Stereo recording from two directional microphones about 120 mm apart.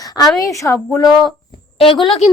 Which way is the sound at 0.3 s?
30° left (ahead or behind).